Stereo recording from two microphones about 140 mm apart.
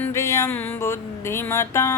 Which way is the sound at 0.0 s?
20° left (ahead or behind).